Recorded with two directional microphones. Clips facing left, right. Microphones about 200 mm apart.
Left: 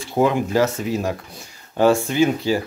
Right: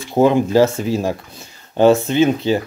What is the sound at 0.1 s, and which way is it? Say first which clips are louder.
Speech: right 5 dB; 30° right (ahead or behind).